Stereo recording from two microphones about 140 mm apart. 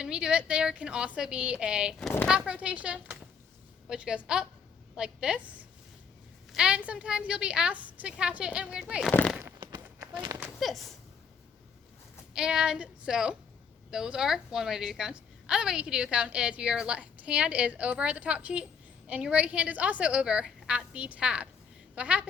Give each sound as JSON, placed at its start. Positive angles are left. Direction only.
{"t": 0.0, "sound": "a woman's voice", "side_deg": -5}
{"t": 9.6, "sound": "run", "side_deg": -30}
{"t": 10.6, "sound": "speech", "side_deg": 0}
{"t": 12.3, "sound": "a woman's voice", "side_deg": -5}